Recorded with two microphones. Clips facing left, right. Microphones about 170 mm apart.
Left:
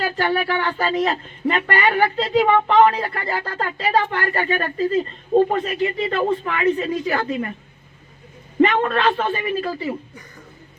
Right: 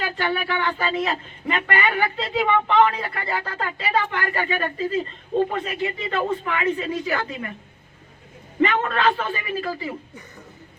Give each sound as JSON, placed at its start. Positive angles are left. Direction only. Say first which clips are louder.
{"t": 0.2, "sound": "speech", "louder": "left 3 dB", "side_deg": 40}
{"t": 8.6, "sound": "speech", "louder": "left 3 dB", "side_deg": 30}